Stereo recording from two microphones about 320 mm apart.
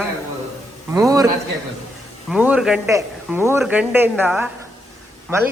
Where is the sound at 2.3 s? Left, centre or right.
Centre.